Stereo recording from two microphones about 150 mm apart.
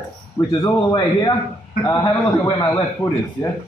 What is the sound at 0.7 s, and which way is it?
A man's voice, 25° left (ahead or behind).